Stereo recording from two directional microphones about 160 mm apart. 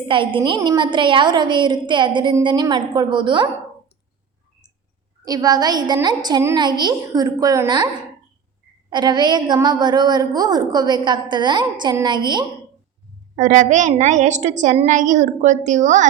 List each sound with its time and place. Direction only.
0.1 s a woman's voice: 30° right (ahead or behind)
5.2 s a woman's voice: 25° right (ahead or behind)
8.9 s a woman's voice: 25° right (ahead or behind)
13.3 s a woman's voice: 50° right (ahead or behind)